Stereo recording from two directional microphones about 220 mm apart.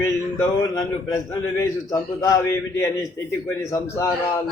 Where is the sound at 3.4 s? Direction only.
15° left (ahead or behind).